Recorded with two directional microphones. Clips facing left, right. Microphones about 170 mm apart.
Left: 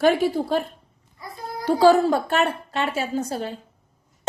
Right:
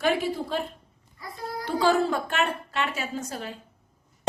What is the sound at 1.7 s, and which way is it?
A woman's voice, 35° left (ahead or behind).